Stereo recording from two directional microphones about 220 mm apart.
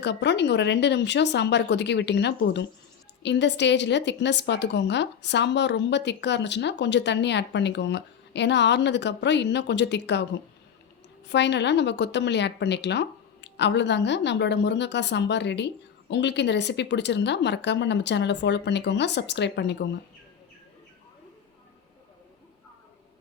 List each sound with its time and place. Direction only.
0.0 s a woman's voice: 50° left (ahead or behind)
11.3 s a woman's voice: 50° left (ahead or behind)